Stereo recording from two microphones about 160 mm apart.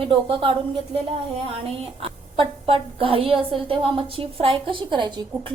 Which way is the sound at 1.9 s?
35° right (ahead or behind).